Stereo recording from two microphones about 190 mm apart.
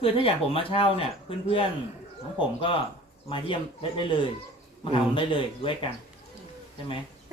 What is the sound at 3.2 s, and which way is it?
Speech, 25° left (ahead or behind).